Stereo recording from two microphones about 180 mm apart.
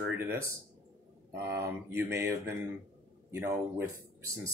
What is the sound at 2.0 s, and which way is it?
Speech, 15° right (ahead or behind).